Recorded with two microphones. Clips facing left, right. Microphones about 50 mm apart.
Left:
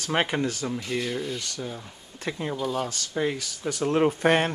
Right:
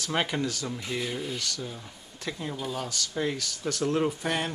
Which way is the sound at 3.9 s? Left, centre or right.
Left.